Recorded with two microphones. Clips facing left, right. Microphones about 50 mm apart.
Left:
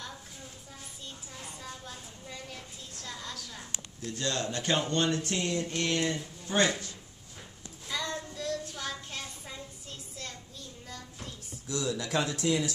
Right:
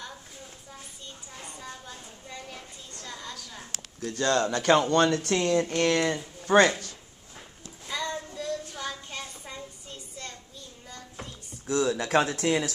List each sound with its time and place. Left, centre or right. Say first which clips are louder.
1.4 s a sound: right 2 dB; centre
4.2 s speech: right 8 dB; right
4.9 s speech: right 6 dB; right
7.9 s child singing: right 3 dB; centre
11.6 s speech: right 7 dB; right